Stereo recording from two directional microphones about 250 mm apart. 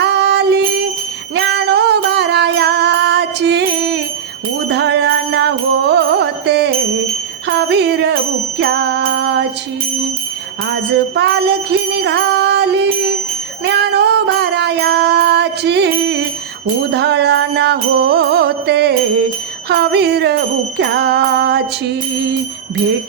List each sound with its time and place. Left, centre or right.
0.0 s music: right
11.1 s music: right
13.7 s child singing: right
16.9 s music: right
19.6 s jingle bell: right